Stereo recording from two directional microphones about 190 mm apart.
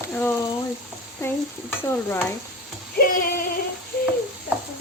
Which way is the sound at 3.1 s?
50° left (ahead or behind).